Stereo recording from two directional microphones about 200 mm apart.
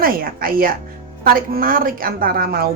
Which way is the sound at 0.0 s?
45° right (ahead or behind).